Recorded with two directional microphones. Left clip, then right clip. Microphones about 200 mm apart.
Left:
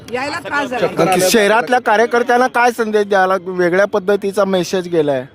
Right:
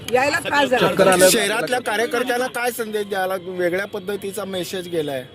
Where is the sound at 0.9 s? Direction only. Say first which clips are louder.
Left 3 dB; 45° left (ahead or behind).